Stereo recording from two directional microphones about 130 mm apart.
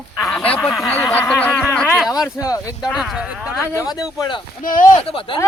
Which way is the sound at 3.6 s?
20° left (ahead or behind).